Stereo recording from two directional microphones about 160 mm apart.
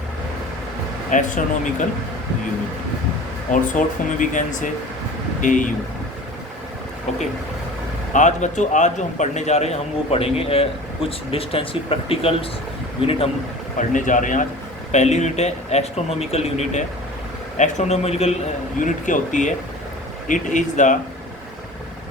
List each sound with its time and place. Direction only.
1.1 s speech: 50° left (ahead or behind)
3.5 s speech: 55° left (ahead or behind)
8.1 s a man's voice: 50° left (ahead or behind)
13.7 s speech: 50° left (ahead or behind)
18.8 s speech: 55° left (ahead or behind)